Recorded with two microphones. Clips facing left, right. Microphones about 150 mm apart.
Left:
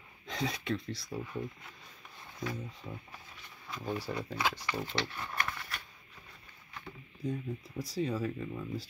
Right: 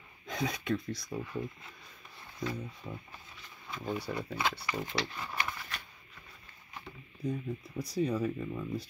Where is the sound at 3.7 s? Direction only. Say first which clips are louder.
Right 1 dB; 5° left (ahead or behind).